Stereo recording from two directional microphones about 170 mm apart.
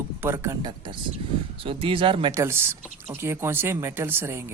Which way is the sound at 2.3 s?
15° right (ahead or behind).